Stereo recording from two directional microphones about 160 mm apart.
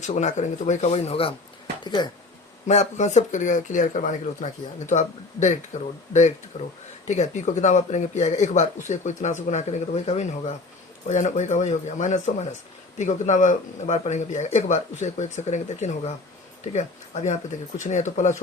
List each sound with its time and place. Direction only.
0.0 s speech: 45° left (ahead or behind)
1.8 s speech: 25° left (ahead or behind)
2.6 s speech: 45° left (ahead or behind)
6.5 s speech: 45° left (ahead or behind)